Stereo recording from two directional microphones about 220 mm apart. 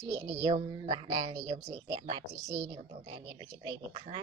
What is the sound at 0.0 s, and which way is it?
A woman's voice, 15° right (ahead or behind).